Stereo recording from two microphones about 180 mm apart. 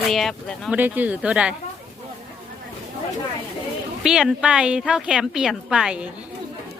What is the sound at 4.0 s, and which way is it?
Speech, centre (ahead or behind).